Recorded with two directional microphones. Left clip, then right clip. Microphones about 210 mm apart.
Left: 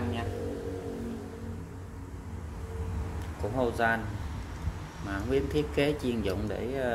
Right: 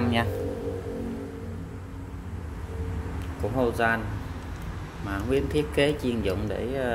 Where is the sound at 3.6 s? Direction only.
Centre (ahead or behind).